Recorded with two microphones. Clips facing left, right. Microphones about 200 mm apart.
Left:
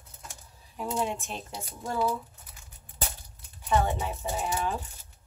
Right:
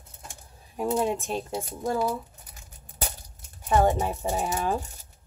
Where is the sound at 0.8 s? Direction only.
55° right (ahead or behind).